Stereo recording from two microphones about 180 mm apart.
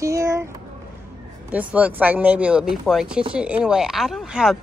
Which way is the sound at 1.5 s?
10° right (ahead or behind).